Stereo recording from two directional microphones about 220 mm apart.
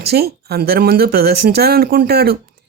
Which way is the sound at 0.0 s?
45° right (ahead or behind).